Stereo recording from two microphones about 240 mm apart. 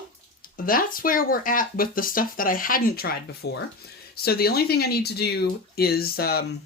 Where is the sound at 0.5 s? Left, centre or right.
Left.